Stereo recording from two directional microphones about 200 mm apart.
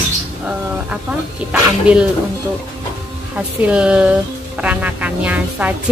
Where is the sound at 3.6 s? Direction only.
5° right (ahead or behind).